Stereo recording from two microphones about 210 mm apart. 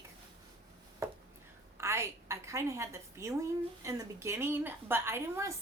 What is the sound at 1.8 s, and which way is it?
A woman's voice, 10° right (ahead or behind).